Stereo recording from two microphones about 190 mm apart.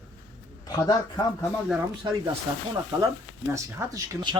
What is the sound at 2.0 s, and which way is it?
Speech, 20° right (ahead or behind).